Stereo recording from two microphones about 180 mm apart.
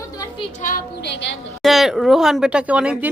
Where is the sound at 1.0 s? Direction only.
70° left (ahead or behind).